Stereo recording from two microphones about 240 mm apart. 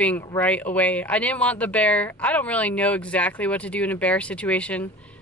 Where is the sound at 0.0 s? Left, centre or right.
Centre.